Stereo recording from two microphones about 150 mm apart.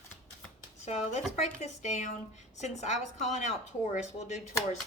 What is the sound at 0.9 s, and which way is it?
A woman's voice, 50° left (ahead or behind).